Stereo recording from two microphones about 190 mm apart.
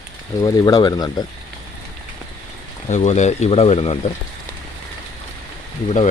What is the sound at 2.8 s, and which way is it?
Speech, 40° left (ahead or behind).